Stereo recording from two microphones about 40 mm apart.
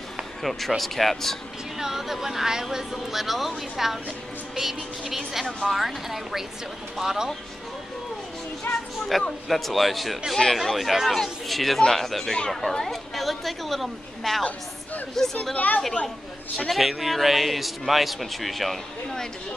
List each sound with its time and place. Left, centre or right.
0.4 s a man's voice: centre
1.8 s a man's voice: centre
9.1 s a man's voice: centre
15.5 s a woman's voice: left
16.7 s a man's voice: centre